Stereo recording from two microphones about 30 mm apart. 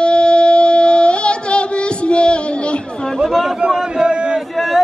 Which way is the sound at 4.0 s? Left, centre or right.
Right.